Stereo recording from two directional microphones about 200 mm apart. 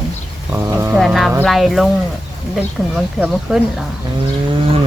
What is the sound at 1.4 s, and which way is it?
Speech, centre (ahead or behind).